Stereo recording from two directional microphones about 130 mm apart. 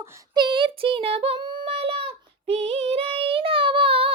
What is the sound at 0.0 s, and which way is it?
Female singing, 40° right (ahead or behind).